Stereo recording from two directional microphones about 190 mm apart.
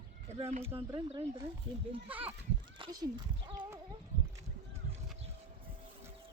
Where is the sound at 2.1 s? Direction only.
10° right (ahead or behind).